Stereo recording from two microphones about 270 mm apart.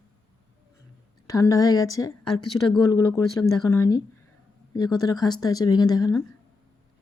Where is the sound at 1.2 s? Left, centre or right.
Centre.